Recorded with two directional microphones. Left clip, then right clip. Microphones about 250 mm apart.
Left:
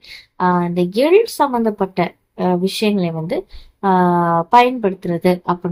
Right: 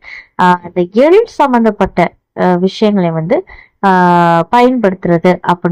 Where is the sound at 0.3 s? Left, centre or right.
Right.